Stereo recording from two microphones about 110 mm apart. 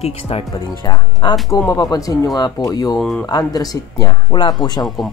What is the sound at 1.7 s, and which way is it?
Speech, 35° left (ahead or behind).